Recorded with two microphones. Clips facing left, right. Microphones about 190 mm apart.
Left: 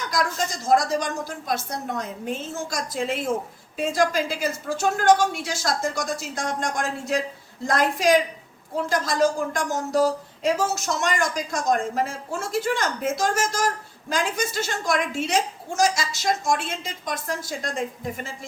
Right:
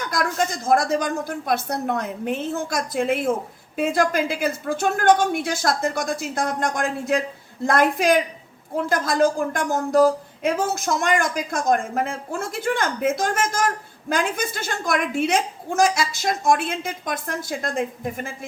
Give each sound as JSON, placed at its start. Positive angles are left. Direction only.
{"t": 0.1, "sound": "a woman's voice", "side_deg": -55}